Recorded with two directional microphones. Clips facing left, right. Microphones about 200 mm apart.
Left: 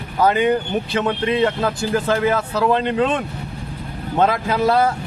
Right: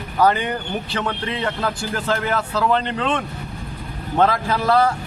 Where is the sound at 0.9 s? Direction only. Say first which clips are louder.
Left 7 dB; 20° left (ahead or behind).